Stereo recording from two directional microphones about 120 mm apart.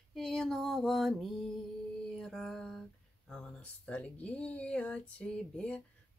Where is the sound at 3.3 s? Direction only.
10° left (ahead or behind).